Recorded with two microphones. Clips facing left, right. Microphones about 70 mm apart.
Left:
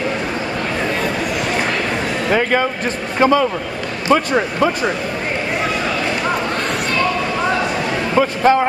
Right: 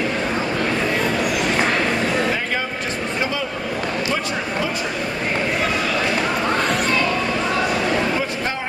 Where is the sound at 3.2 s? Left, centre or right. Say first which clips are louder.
Left 13 dB; left.